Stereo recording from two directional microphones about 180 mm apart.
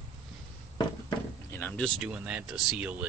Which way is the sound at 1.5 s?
10° left (ahead or behind).